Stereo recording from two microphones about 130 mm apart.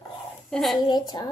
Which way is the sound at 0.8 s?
35° left (ahead or behind).